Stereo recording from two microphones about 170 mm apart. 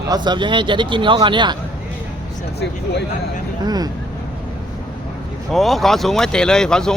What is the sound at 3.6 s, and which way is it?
Speech, 25° right (ahead or behind).